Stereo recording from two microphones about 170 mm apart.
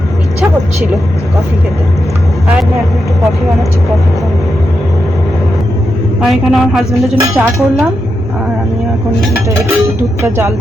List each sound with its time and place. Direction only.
6.2 s speech: centre (ahead or behind)
7.2 s speech: 15° right (ahead or behind)
9.5 s speech: 15° right (ahead or behind)